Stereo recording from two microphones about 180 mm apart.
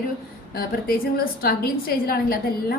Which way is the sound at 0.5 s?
55° left (ahead or behind).